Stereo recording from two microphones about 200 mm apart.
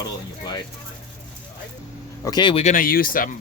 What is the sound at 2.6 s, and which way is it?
Speech, 40° left (ahead or behind).